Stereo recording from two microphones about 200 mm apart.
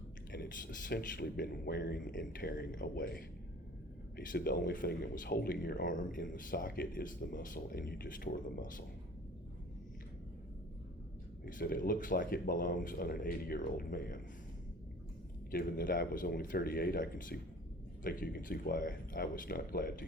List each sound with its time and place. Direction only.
0.3 s speech: 45° left (ahead or behind)
4.3 s speech: 50° left (ahead or behind)
11.4 s speech: 45° left (ahead or behind)
15.4 s speech: 45° left (ahead or behind)